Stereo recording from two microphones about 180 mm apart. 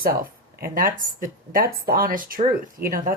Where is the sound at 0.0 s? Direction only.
50° right (ahead or behind).